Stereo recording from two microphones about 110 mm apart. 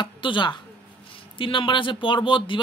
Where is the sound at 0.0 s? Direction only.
45° left (ahead or behind).